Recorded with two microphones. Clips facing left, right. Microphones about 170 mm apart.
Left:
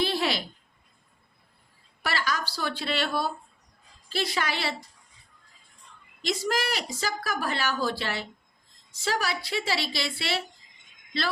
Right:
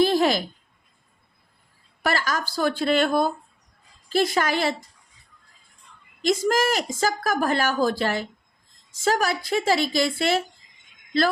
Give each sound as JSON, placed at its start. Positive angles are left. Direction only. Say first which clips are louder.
{"t": 0.0, "sound": "a sound", "louder": "right 8 dB", "side_deg": -45}
{"t": 2.0, "sound": "speech", "louder": "right 5 dB", "side_deg": -45}
{"t": 6.2, "sound": "speech", "louder": "right 7 dB", "side_deg": -45}